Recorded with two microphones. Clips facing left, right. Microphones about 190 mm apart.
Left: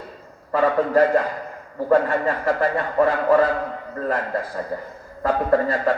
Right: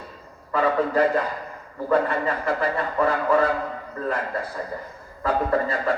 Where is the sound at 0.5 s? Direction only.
45° left (ahead or behind).